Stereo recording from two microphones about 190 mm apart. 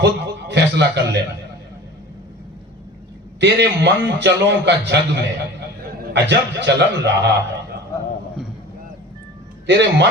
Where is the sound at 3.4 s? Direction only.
65° right (ahead or behind).